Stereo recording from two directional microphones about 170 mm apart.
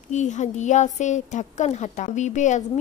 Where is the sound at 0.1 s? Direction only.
45° left (ahead or behind).